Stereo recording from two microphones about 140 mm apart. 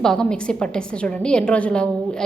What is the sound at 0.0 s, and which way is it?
A woman's voice, 5° left (ahead or behind).